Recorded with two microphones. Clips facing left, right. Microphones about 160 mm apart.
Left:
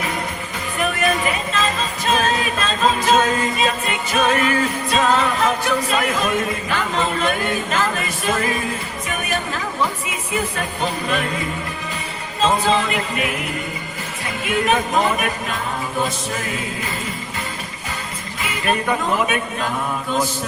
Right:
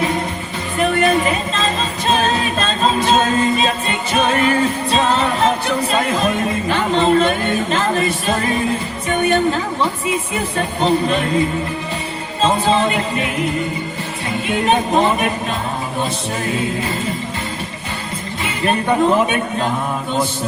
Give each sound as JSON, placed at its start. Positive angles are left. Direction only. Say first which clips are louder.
{"t": 0.8, "sound": "music", "louder": "right 5 dB", "side_deg": -35}
{"t": 9.0, "sound": "a woman's voice", "louder": "right 10 dB", "side_deg": -30}
{"t": 10.8, "sound": "a man's voice", "louder": "right 7 dB", "side_deg": -30}
{"t": 12.4, "sound": "a man's voice", "louder": "right 2 dB", "side_deg": -30}
{"t": 14.6, "sound": "a man's voice", "louder": "right 3 dB", "side_deg": -30}
{"t": 18.6, "sound": "a man's voice", "louder": "right 5 dB", "side_deg": -30}